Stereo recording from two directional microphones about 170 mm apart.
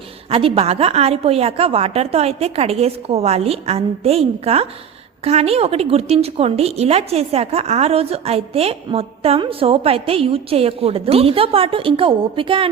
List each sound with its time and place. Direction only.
0.3 s a woman's voice: 35° right (ahead or behind)